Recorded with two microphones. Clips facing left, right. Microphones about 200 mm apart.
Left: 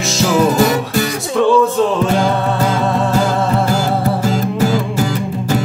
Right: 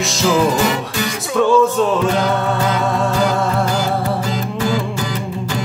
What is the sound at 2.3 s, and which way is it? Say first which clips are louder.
Music: left 2 dB; centre (ahead or behind).